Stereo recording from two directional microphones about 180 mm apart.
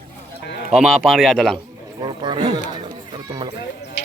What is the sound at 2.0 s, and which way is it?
Speech, 25° right (ahead or behind).